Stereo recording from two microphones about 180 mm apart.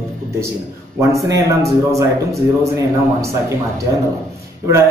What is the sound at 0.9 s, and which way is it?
A man's voice, 15° right (ahead or behind).